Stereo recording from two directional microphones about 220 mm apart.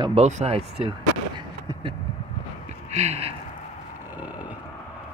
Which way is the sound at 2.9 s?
30° right (ahead or behind).